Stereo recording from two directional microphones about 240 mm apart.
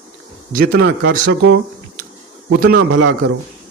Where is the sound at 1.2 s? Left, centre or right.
Right.